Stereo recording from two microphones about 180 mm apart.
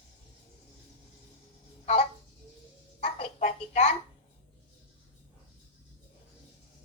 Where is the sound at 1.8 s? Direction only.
40° left (ahead or behind).